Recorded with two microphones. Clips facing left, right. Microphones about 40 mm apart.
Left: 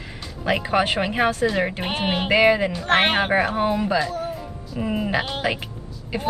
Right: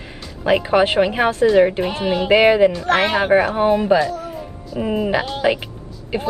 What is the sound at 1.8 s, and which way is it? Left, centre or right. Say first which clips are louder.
Speech: right 3 dB; left.